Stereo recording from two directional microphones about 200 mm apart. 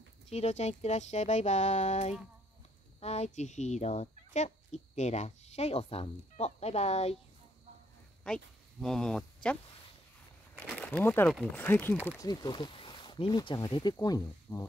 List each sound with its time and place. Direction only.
0.3 s speech: 30° left (ahead or behind)
8.8 s speech: 5° left (ahead or behind)
10.6 s speech: 5° left (ahead or behind)
12.2 s speech: 20° left (ahead or behind)